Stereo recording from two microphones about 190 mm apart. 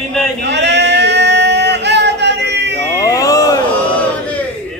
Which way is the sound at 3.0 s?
20° left (ahead or behind).